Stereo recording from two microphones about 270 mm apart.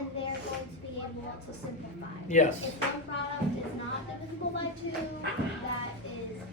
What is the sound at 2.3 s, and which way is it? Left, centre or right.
Speech, left.